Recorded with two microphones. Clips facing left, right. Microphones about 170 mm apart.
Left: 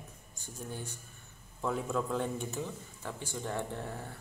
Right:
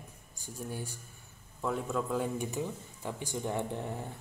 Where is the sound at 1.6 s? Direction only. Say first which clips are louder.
Even; centre (ahead or behind).